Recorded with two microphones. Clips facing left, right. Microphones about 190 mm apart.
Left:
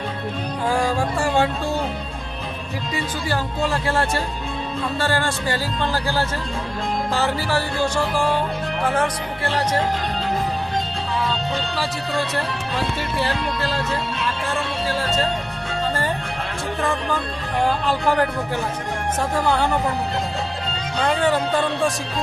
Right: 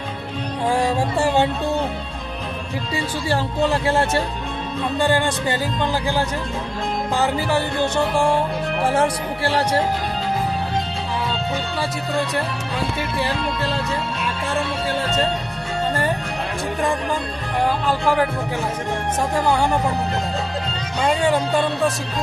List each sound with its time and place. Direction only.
0.6 s music: 25° right (ahead or behind)
2.9 s speech: 25° right (ahead or behind)
4.9 s music: 15° right (ahead or behind)
7.1 s speech: 15° right (ahead or behind)
21.0 s music: 10° right (ahead or behind)